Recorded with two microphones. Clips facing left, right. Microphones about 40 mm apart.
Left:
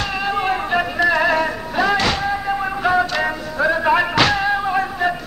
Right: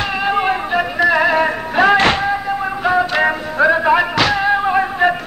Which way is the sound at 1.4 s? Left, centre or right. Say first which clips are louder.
Right 5 dB; right.